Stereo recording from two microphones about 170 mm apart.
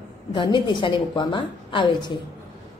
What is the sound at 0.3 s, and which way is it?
A woman's voice, 30° left (ahead or behind).